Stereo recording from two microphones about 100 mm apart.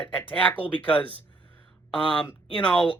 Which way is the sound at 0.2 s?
15° left (ahead or behind).